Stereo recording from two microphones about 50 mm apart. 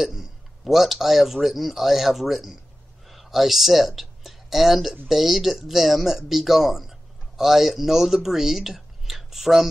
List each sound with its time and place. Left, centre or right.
0.0 s a man's voice: centre